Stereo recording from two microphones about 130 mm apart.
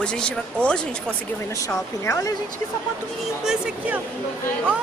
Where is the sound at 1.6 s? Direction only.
20° left (ahead or behind).